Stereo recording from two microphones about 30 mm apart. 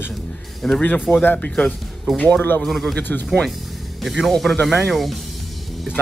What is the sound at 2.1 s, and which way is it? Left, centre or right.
Speech, left.